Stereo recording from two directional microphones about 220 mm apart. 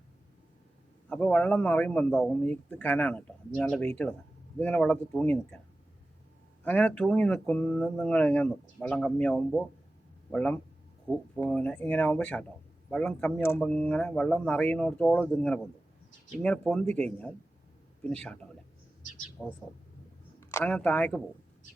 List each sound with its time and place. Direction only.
1.1 s a man's voice: 5° left (ahead or behind)
6.7 s a man's voice: 5° left (ahead or behind)
19.4 s speech: 5° left (ahead or behind)